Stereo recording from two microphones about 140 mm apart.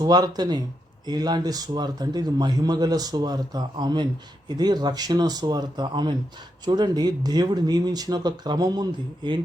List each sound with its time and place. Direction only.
0.0 s a man's voice: 30° right (ahead or behind)